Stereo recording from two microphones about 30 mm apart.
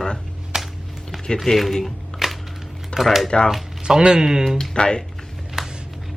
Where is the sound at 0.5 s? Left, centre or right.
Centre.